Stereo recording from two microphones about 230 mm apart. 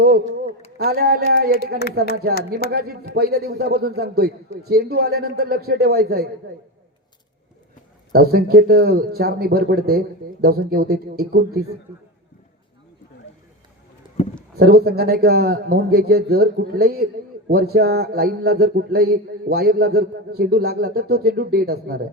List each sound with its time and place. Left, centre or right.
0.9 s a man's voice: right
8.1 s a man's voice: right
14.5 s a man's voice: right